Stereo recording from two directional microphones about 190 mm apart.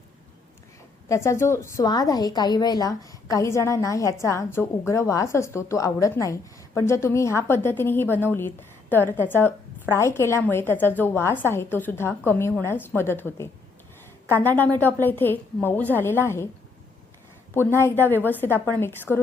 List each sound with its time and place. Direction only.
1.0 s a woman's voice: 15° left (ahead or behind)
17.7 s a woman's voice: 10° left (ahead or behind)